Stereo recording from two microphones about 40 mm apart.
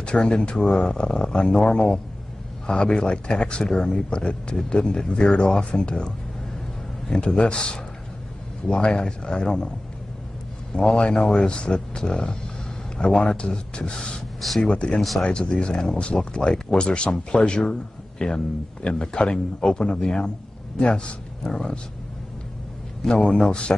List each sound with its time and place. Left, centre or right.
0.0 s speech: left
10.7 s speech: left
23.0 s speech: centre